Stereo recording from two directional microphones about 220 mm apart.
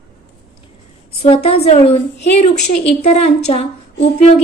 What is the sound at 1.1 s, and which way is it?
A woman's voice, 25° left (ahead or behind).